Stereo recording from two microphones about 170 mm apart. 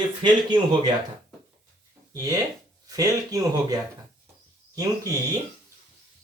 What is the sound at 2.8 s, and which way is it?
Speech, 20° right (ahead or behind).